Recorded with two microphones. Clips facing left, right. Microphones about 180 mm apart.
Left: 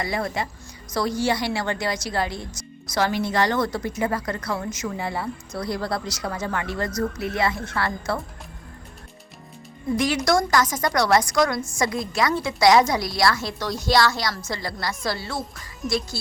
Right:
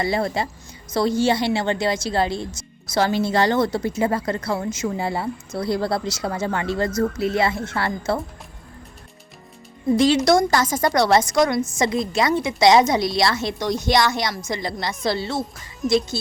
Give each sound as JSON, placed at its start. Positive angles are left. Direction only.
{"t": 0.0, "sound": "a woman's voice", "side_deg": -30}
{"t": 9.9, "sound": "a woman's voice", "side_deg": -25}